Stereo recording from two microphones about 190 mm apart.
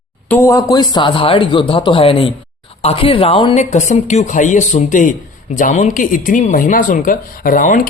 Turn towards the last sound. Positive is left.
turn(degrees=45)  # may be behind; listen again after turning